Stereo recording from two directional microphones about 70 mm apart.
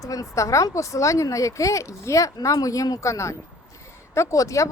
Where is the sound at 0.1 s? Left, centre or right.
Left.